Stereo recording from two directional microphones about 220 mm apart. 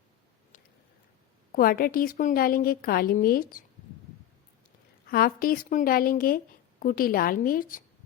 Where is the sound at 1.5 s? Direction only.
40° left (ahead or behind).